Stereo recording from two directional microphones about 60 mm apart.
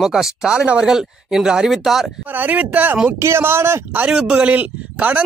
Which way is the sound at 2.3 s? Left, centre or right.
Right.